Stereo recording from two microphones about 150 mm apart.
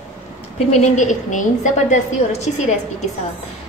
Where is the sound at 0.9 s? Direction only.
55° left (ahead or behind).